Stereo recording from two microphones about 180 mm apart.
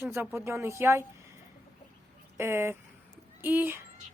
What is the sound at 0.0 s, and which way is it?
A woman's voice, 15° right (ahead or behind).